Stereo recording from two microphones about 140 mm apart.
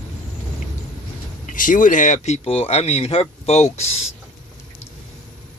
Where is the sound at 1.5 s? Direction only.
70° left (ahead or behind); by 3.9 s 50° left (ahead or behind).